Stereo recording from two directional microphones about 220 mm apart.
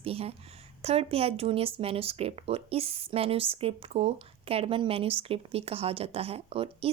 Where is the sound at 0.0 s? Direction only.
25° right (ahead or behind).